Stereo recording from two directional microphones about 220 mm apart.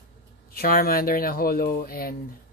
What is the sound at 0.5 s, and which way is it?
Speech, 45° left (ahead or behind).